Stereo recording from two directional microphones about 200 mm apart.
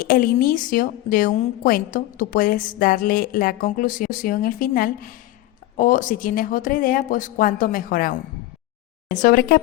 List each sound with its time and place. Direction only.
0.0 s a woman's voice: 45° left (ahead or behind)